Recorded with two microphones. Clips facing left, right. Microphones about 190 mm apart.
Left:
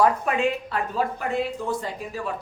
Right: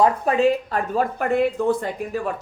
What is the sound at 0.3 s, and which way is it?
A woman's voice, 35° right (ahead or behind).